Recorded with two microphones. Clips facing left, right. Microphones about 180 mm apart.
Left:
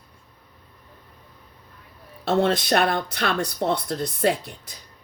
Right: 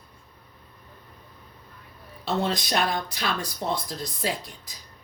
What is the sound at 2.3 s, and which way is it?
Speech, 65° left (ahead or behind).